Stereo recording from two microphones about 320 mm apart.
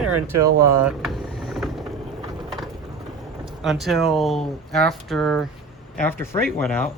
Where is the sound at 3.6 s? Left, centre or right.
Centre.